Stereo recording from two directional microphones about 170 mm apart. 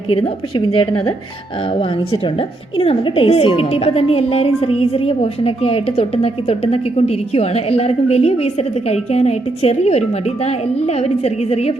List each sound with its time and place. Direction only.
0.7 s speech: 30° left (ahead or behind)
2.7 s speech: 35° left (ahead or behind)
11.2 s speech: 35° left (ahead or behind)